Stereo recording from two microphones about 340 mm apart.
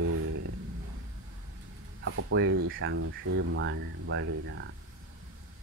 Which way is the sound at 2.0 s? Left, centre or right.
Right.